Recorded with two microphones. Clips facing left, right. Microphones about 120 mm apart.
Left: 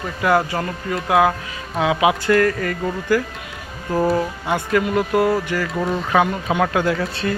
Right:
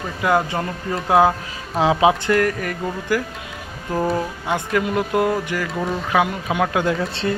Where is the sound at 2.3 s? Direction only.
15° right (ahead or behind).